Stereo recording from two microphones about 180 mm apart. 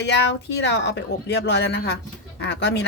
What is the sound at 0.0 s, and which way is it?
Speech, 70° left (ahead or behind).